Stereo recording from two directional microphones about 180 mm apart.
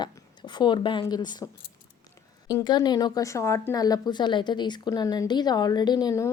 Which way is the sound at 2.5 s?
20° left (ahead or behind).